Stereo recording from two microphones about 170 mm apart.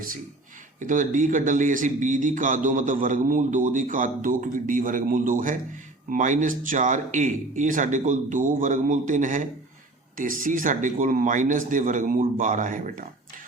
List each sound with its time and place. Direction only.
0.8 s a man's voice: 50° right (ahead or behind)